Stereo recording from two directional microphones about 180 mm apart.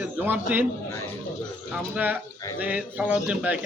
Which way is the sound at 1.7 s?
10° right (ahead or behind).